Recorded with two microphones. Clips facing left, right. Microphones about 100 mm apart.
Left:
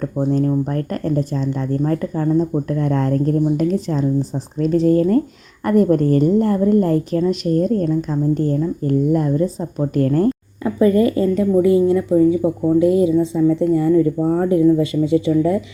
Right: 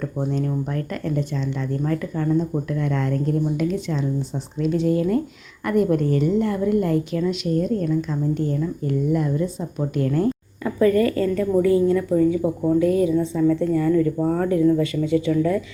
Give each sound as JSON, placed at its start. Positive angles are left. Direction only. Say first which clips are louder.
{"t": 0.3, "sound": "speech", "louder": "left 9 dB", "side_deg": 40}
{"t": 10.6, "sound": "a woman's voice", "louder": "left 3 dB", "side_deg": 20}